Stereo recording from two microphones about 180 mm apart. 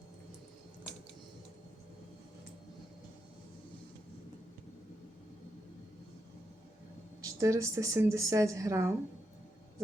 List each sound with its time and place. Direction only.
7.3 s a woman's voice: 20° right (ahead or behind)